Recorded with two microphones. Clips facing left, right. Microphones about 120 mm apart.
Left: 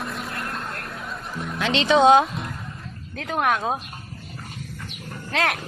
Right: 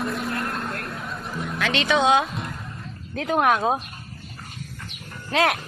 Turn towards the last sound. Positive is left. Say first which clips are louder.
# right 3 dB
turn(degrees=-5)  # may be behind; listen again after turning